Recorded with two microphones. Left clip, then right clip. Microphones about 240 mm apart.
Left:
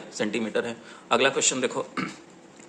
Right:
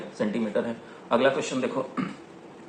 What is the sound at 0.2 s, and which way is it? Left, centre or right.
Speech, left.